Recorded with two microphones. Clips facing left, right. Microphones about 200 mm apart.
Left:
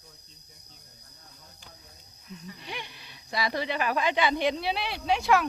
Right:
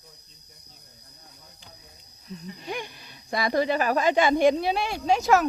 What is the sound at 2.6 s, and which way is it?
Speech, 45° right (ahead or behind).